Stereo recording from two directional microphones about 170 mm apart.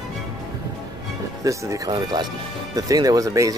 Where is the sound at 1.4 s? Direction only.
20° right (ahead or behind).